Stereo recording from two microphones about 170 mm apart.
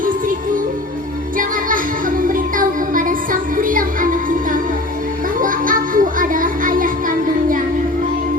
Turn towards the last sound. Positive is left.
turn(degrees=-55)  # may be behind; listen again after turning